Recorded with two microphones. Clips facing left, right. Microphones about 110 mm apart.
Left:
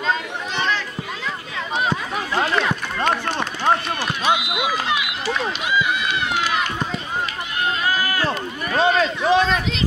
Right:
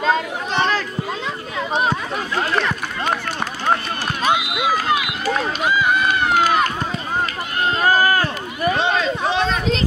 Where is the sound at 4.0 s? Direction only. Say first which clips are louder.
Right 1 dB; 45° right (ahead or behind).